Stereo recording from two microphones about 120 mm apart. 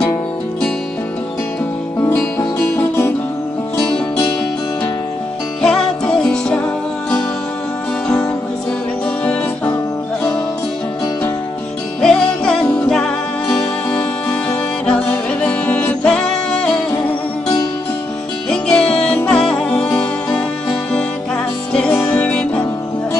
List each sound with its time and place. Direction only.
2.0 s music: 15° left (ahead or behind)
5.6 s music: 5° left (ahead or behind)
12.0 s music: 5° left (ahead or behind)
18.5 s music: 10° left (ahead or behind)
21.7 s music: 10° left (ahead or behind)